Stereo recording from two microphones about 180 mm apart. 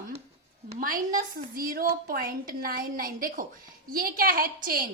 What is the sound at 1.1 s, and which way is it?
A woman's voice, 55° right (ahead or behind).